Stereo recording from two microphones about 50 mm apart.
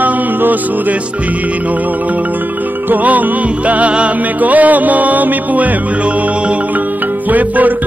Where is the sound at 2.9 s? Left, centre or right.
Right.